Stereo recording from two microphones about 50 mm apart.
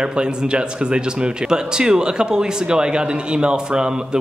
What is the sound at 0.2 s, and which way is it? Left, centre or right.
Speech, centre.